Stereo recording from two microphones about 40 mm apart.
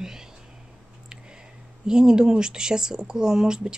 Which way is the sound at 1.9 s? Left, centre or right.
Centre.